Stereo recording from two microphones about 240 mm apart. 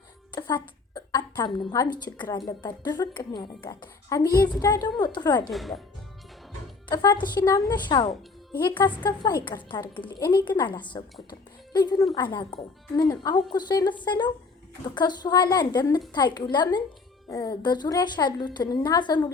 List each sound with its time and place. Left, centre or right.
0.3 s a woman's voice: centre
5.5 s speech: centre
6.8 s a woman's voice: centre